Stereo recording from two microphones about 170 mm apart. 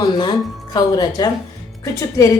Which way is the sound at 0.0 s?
25° left (ahead or behind).